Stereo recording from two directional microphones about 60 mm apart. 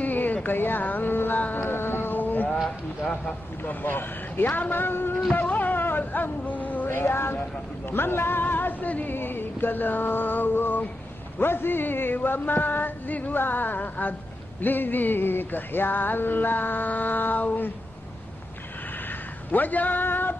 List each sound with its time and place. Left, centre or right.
0.0 s a sound: left
3.6 s music: left
19.0 s speech: left